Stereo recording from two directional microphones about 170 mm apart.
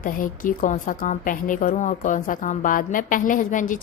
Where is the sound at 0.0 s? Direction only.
55° left (ahead or behind).